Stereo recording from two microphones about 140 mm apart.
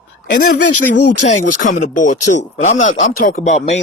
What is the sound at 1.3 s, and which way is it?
Speech, 65° left (ahead or behind).